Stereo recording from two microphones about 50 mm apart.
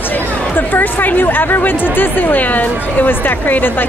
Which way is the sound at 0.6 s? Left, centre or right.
Left.